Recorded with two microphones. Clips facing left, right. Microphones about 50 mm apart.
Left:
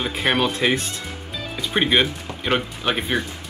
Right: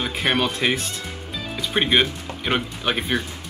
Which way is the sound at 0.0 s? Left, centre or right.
Centre.